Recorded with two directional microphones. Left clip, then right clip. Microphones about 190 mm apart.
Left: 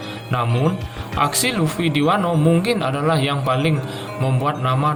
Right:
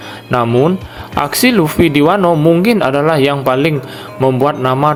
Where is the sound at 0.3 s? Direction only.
45° right (ahead or behind).